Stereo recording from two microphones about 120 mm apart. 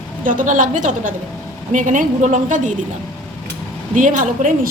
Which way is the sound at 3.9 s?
90° right.